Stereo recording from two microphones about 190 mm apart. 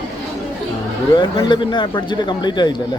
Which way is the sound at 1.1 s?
25° left (ahead or behind).